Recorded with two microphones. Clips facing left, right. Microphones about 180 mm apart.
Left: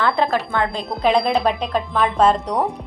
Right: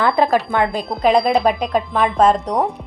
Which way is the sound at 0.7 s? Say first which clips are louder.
Right 2 dB; centre (ahead or behind).